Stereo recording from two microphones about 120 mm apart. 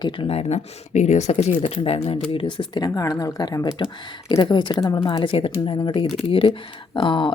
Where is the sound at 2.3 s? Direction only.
45° left (ahead or behind).